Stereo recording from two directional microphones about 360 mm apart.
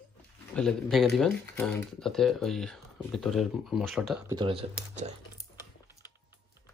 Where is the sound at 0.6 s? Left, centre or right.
Centre.